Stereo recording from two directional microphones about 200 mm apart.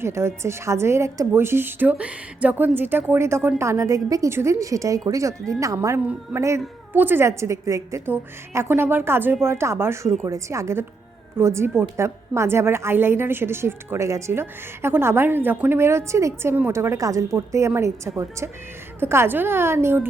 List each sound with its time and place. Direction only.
0.0 s a woman's voice: 15° right (ahead or behind)